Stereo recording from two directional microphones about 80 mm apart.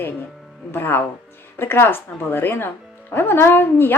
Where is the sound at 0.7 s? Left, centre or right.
Left.